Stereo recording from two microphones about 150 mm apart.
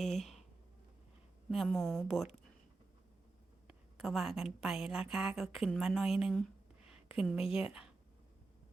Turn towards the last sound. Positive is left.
turn(degrees=-5)  # may be behind; listen again after turning